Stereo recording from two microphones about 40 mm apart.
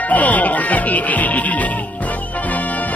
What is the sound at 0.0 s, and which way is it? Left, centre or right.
Music, left.